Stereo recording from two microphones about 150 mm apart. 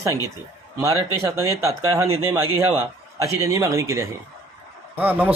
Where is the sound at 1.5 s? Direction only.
20° right (ahead or behind).